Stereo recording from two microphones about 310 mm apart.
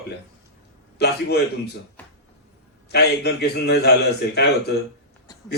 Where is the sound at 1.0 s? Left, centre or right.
Left.